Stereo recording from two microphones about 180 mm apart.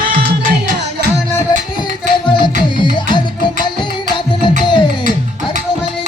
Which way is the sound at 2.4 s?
25° left (ahead or behind).